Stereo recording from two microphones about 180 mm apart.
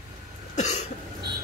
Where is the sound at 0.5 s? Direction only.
40° left (ahead or behind).